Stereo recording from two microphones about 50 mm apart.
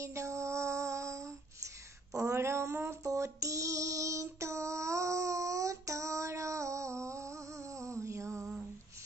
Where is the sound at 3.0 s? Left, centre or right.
Right.